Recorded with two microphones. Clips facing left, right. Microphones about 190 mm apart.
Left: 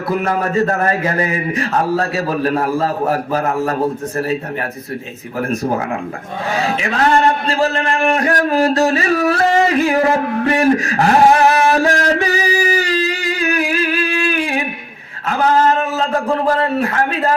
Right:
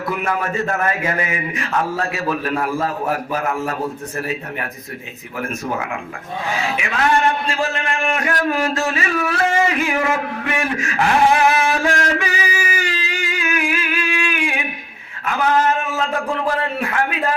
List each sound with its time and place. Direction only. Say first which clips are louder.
0.1 s a man's voice: left 6 dB; 35° left (ahead or behind)
5.4 s a man's voice: left 6 dB; 35° left (ahead or behind)